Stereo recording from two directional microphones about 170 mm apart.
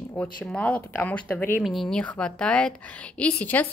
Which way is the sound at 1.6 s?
Centre (ahead or behind).